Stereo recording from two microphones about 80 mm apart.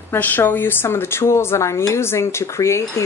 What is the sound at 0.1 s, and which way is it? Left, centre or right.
Speech, left.